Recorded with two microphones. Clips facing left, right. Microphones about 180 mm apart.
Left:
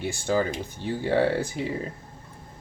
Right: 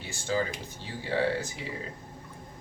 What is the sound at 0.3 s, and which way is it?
Speech, 55° left (ahead or behind).